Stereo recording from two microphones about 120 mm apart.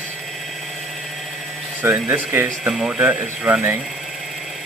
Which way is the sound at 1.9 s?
15° right (ahead or behind).